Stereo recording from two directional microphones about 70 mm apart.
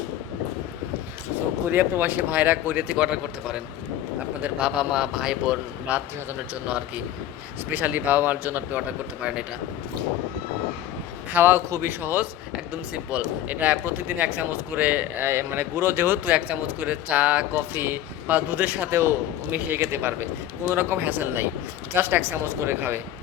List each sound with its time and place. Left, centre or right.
1.7 s speech: right
3.1 s a man's voice: centre; by 8.8 s right
11.3 s speech: right
15.3 s speech: right